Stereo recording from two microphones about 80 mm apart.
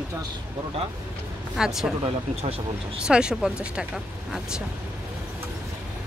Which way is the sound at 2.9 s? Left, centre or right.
Centre.